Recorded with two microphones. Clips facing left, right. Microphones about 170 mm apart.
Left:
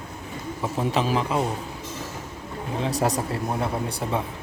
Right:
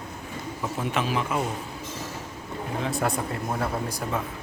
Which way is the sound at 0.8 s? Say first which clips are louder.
Left 4 dB; 35° left (ahead or behind).